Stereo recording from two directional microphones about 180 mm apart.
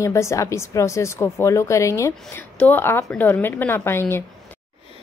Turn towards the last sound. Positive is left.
turn(degrees=15)  # may be behind; listen again after turning